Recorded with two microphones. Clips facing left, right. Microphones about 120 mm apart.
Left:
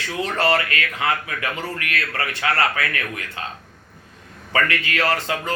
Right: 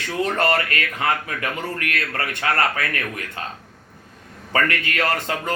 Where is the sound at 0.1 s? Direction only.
45° right (ahead or behind).